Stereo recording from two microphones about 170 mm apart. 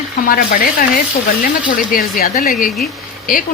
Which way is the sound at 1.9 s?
55° left (ahead or behind).